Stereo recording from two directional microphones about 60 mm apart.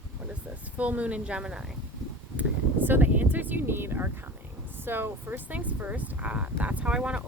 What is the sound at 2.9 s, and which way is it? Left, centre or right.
Speech, right.